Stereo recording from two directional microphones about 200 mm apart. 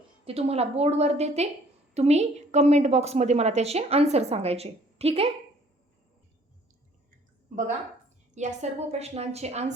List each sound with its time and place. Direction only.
0.3 s a woman's voice: 30° right (ahead or behind)
8.4 s a woman's voice: 35° right (ahead or behind)